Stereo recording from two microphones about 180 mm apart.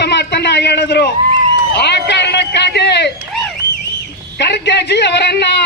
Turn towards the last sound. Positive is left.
turn(degrees=70)  # may be behind; listen again after turning